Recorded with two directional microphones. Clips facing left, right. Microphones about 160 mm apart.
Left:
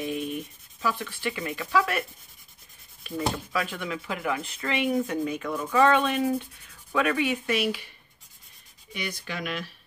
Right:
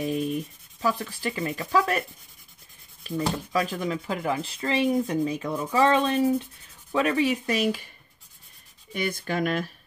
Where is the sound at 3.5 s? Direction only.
35° right (ahead or behind).